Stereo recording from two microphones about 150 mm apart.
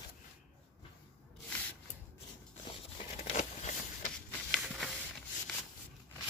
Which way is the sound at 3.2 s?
50° left (ahead or behind).